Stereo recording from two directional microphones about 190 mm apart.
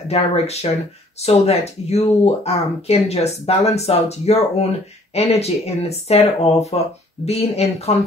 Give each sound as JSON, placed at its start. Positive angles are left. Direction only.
{"t": 0.1, "sound": "speech", "side_deg": 35}